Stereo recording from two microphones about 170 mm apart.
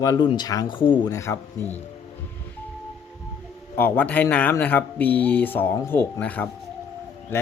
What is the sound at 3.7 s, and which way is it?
A man's voice, 10° left (ahead or behind).